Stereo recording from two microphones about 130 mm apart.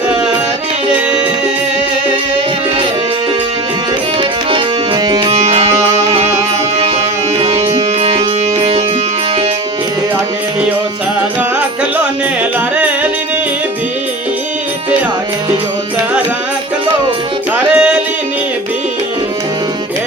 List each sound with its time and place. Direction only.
5.0 s music: 30° right (ahead or behind)
7.3 s music: 40° right (ahead or behind)
12.7 s music: 10° right (ahead or behind)
17.7 s music: 10° right (ahead or behind)